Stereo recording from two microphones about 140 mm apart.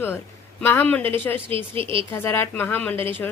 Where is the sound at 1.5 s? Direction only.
40° right (ahead or behind).